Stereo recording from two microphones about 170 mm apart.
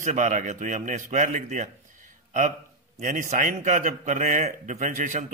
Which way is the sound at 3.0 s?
50° right (ahead or behind).